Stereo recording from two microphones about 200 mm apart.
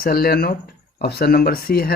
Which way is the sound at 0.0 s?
50° left (ahead or behind).